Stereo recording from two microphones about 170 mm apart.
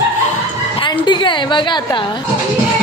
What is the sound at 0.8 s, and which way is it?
A woman's voice, 25° left (ahead or behind).